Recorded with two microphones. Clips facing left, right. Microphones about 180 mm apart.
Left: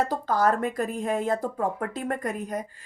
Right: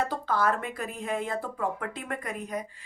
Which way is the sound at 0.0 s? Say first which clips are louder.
Left 4 dB; 40° left (ahead or behind).